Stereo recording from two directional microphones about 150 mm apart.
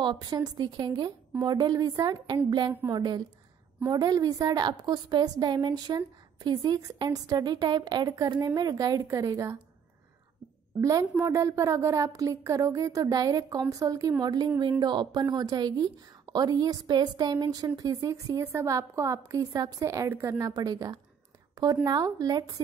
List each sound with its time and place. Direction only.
0.0 s a woman's voice: 30° right (ahead or behind)
10.8 s a woman's voice: 20° right (ahead or behind)